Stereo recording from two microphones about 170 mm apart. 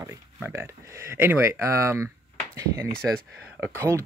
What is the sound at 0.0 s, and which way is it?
Speech, 15° right (ahead or behind).